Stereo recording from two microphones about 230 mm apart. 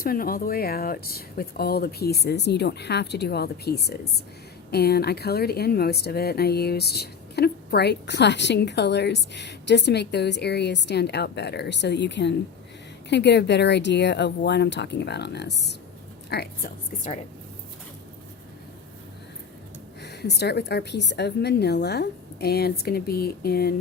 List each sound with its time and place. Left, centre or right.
0.0 s a woman's voice: left
20.0 s speech: left